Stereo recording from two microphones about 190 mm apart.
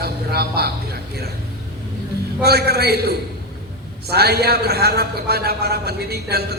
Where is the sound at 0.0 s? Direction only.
55° right (ahead or behind).